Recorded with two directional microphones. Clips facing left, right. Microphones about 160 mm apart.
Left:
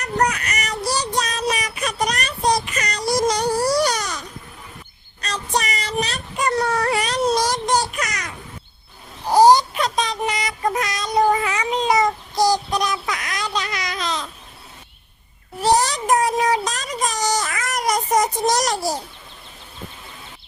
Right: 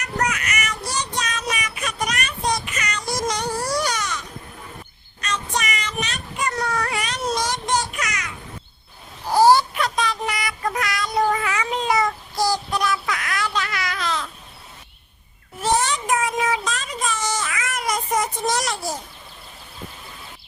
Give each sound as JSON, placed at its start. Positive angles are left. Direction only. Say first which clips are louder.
{"t": 0.0, "sound": "child singing", "louder": "left 4 dB", "side_deg": 35}
{"t": 5.2, "sound": "child singing", "louder": "left 2 dB", "side_deg": 35}
{"t": 9.3, "sound": "child singing", "louder": "left 2 dB", "side_deg": 20}
{"t": 15.6, "sound": "child singing", "louder": "left 3 dB", "side_deg": 35}